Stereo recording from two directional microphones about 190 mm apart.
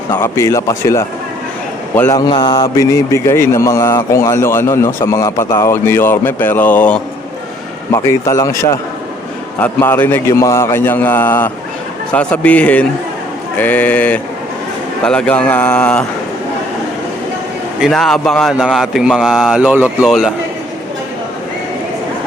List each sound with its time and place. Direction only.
0.1 s a man's voice: 15° left (ahead or behind)
17.7 s speech: centre (ahead or behind)